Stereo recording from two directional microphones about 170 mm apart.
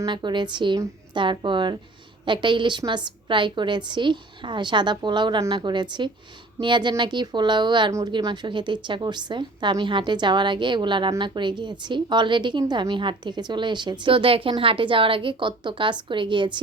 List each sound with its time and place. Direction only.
0.0 s speech: 25° right (ahead or behind)